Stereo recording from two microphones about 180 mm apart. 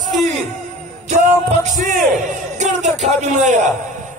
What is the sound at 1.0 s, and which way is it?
Music, 40° right (ahead or behind).